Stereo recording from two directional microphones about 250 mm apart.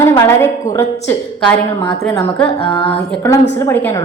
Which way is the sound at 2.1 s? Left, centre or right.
Centre.